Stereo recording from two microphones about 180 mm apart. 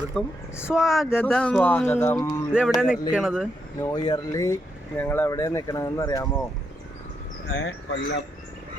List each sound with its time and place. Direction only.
0.1 s speech: 5° left (ahead or behind)
2.5 s speech: 5° right (ahead or behind)
3.8 s speech: 20° left (ahead or behind)
7.5 s speech: 90° left